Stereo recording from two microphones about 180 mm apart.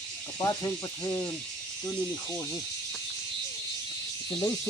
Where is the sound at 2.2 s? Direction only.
10° left (ahead or behind).